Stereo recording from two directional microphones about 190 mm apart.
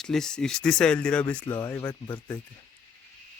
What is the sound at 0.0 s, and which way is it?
Speech, centre (ahead or behind).